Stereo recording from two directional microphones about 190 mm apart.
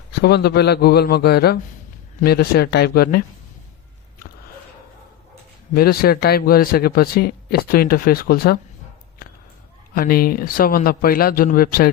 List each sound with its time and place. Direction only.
0.2 s a man's voice: 60° left (ahead or behind)
5.7 s speech: 50° left (ahead or behind)
9.9 s speech: 50° left (ahead or behind)